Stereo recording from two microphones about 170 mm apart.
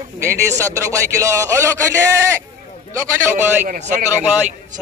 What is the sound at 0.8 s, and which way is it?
Speech, 20° right (ahead or behind).